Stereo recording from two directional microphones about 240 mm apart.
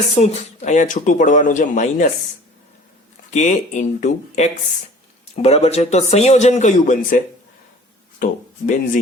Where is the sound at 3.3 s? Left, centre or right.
Left.